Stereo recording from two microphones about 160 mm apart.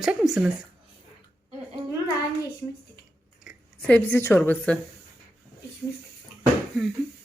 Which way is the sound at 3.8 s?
10° left (ahead or behind).